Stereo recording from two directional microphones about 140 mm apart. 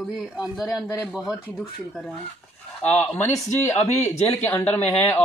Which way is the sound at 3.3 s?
20° left (ahead or behind).